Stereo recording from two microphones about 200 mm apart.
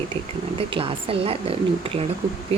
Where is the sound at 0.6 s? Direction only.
25° right (ahead or behind).